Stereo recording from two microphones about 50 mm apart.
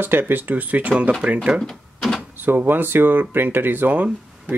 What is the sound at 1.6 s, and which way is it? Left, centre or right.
Cash register, centre.